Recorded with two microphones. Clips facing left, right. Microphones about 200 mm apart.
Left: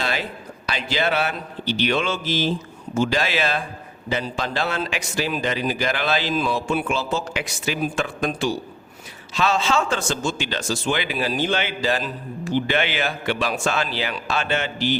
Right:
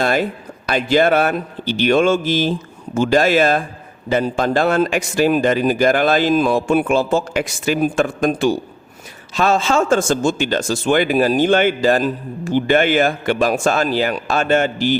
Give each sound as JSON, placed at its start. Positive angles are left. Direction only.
{"t": 0.0, "sound": "a man's voice", "side_deg": -50}